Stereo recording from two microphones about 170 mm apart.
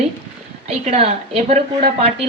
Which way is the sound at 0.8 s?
40° right (ahead or behind).